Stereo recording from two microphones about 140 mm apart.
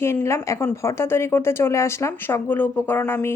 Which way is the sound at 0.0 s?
20° left (ahead or behind).